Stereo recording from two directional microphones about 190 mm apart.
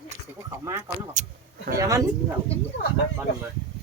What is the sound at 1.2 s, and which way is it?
Speech, 40° right (ahead or behind).